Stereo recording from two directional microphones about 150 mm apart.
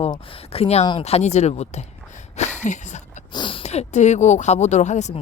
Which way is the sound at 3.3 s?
35° left (ahead or behind).